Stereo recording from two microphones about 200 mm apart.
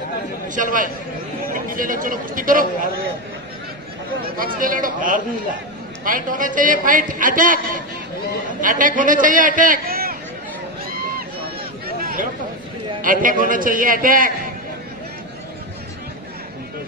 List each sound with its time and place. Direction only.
0.6 s a man's voice: 40° right (ahead or behind)
4.4 s a man's voice: 45° right (ahead or behind)
12.0 s a sound: 45° right (ahead or behind)
13.0 s a man's voice: 45° right (ahead or behind)